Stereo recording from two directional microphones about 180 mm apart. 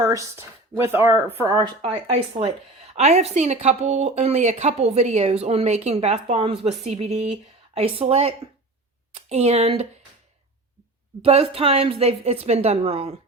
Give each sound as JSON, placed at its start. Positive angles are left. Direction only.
{"t": 0.0, "sound": "speech", "side_deg": -20}
{"t": 1.8, "sound": "a woman's voice", "side_deg": -35}
{"t": 11.2, "sound": "a woman's voice", "side_deg": -30}